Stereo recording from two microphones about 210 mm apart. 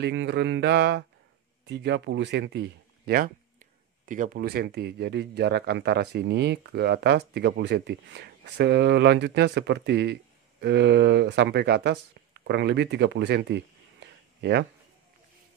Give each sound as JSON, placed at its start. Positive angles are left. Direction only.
{"t": 0.0, "sound": "speech", "side_deg": -55}
{"t": 4.0, "sound": "speech", "side_deg": -40}